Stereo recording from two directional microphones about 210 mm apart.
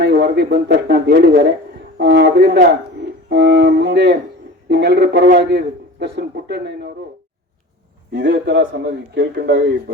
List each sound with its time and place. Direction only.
0.0 s speech: 50° right (ahead or behind)
8.1 s speech: 50° right (ahead or behind)